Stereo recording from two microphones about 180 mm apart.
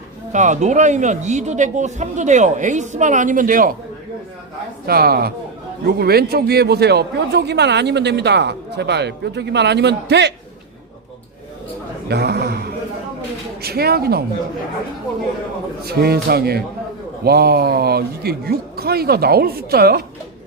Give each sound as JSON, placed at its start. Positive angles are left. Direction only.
{"t": 0.3, "sound": "speech", "side_deg": -40}
{"t": 4.9, "sound": "a man's voice", "side_deg": -60}
{"t": 12.0, "sound": "a sound", "side_deg": -65}
{"t": 13.6, "sound": "speech", "side_deg": -60}
{"t": 15.8, "sound": "speech", "side_deg": -60}